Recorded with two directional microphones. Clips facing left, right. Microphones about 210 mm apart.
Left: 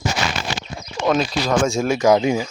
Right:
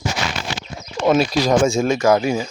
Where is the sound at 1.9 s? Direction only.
15° left (ahead or behind).